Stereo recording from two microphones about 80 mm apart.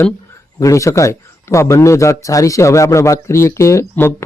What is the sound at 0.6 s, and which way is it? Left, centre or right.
Speech, left.